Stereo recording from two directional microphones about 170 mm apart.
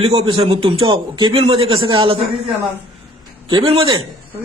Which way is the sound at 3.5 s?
30° right (ahead or behind).